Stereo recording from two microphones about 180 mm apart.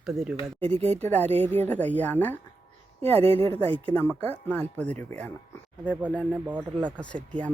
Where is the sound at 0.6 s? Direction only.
35° right (ahead or behind).